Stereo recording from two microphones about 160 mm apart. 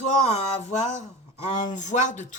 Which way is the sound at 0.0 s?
45° left (ahead or behind).